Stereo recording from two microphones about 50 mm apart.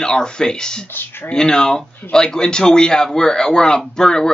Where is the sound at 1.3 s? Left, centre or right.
Centre.